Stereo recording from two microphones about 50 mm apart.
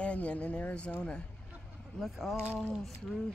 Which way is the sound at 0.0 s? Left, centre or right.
Left.